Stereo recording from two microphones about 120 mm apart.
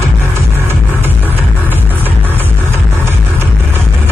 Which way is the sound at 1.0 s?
15° right (ahead or behind).